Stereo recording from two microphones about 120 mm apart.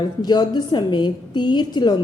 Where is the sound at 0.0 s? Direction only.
35° left (ahead or behind).